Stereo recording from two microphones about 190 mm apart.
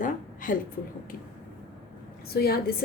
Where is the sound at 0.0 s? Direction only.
45° left (ahead or behind).